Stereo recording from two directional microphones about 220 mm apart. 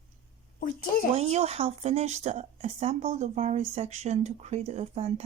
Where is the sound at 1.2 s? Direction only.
30° right (ahead or behind).